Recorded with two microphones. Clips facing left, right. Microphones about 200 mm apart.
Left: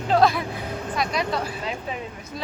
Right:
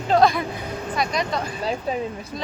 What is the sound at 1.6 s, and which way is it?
Speech, 35° right (ahead or behind).